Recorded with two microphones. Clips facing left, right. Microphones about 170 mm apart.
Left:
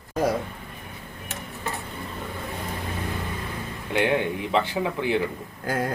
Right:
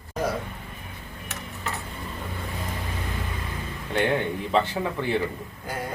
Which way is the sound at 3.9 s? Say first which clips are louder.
Left 1 dB; 10° left (ahead or behind).